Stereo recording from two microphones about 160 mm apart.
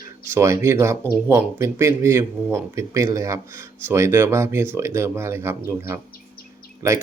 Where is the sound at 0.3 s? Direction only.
15° right (ahead or behind).